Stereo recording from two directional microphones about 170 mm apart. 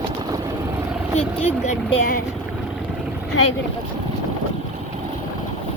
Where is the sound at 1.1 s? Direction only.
35° left (ahead or behind).